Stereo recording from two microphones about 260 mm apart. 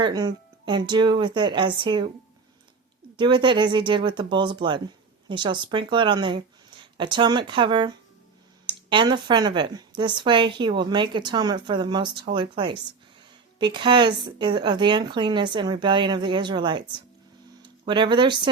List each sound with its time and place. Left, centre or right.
0.0 s speech: centre
3.2 s speech: centre